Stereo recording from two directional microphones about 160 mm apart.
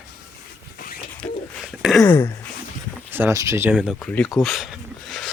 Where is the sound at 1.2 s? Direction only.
Centre (ahead or behind).